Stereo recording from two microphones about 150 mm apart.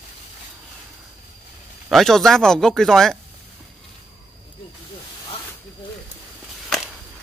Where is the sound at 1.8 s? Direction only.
Centre (ahead or behind).